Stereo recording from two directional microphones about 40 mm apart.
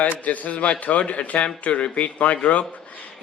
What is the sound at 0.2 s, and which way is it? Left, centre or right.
Speech, left.